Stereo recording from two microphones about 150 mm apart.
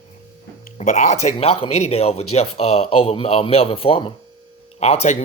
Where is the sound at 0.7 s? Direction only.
50° left (ahead or behind).